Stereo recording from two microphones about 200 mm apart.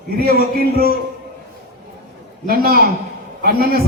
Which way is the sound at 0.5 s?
50° right (ahead or behind).